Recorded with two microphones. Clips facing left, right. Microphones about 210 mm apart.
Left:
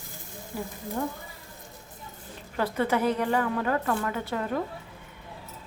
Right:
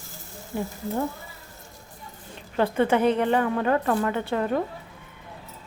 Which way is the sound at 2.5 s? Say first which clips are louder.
Right 5 dB; 25° right (ahead or behind).